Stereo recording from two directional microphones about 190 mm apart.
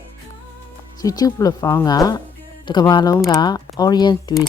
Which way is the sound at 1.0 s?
20° left (ahead or behind).